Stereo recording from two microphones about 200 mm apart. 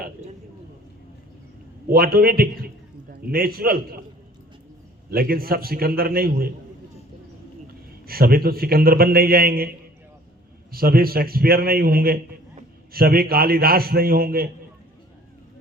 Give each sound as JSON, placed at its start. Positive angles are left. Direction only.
{"t": 1.9, "sound": "a man's voice", "side_deg": -50}
{"t": 5.1, "sound": "a man's voice", "side_deg": -50}
{"t": 8.0, "sound": "a man's voice", "side_deg": -50}
{"t": 10.7, "sound": "a man's voice", "side_deg": -50}